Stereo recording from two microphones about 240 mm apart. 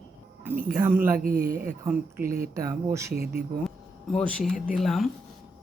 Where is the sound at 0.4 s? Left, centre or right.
Centre.